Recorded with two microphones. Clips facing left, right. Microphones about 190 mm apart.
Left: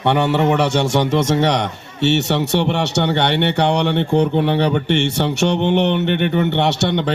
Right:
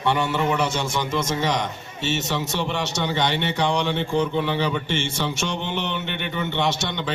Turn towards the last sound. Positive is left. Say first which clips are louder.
# left 7 dB
turn(degrees=65)  # may be behind; listen again after turning